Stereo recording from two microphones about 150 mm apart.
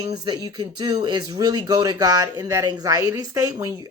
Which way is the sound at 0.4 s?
25° right (ahead or behind).